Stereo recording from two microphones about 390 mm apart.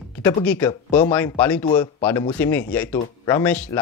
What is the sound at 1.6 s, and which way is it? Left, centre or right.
Speech, centre.